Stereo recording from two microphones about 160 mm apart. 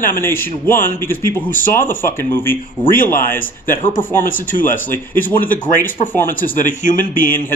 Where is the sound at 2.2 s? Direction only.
15° left (ahead or behind).